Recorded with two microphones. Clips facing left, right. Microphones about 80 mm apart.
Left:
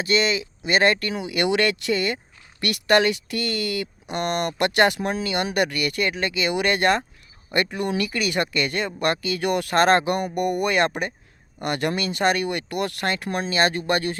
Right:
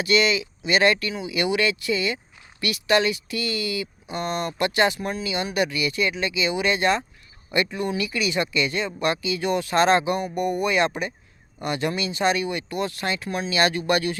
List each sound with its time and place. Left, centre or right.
0.0 s speech: left